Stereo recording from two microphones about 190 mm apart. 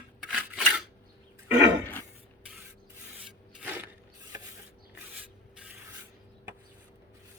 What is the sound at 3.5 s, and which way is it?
Mechanisms, 10° right (ahead or behind).